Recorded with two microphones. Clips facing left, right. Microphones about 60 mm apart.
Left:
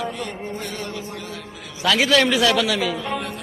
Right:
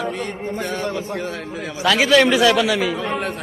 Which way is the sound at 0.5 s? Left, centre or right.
Right.